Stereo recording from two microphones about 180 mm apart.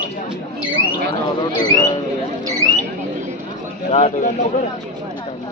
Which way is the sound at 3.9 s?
40° left (ahead or behind).